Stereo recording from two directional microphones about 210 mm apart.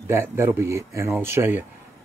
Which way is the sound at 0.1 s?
10° right (ahead or behind).